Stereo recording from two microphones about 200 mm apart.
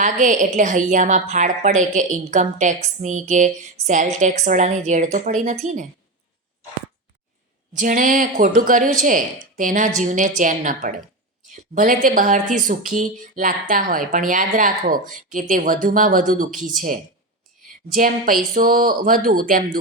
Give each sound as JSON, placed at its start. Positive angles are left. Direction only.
{"t": 0.0, "sound": "a woman's voice", "side_deg": -40}
{"t": 7.8, "sound": "a woman's voice", "side_deg": -40}